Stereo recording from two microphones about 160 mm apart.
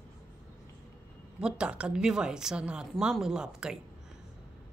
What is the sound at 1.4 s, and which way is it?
Speech, 5° right (ahead or behind).